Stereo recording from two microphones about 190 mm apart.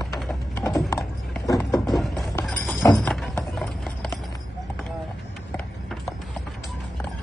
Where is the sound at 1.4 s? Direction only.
20° left (ahead or behind).